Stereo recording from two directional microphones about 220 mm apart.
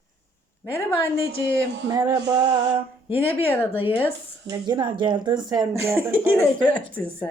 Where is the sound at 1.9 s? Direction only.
15° right (ahead or behind).